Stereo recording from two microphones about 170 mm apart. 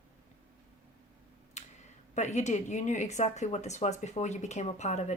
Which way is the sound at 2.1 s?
45° left (ahead or behind).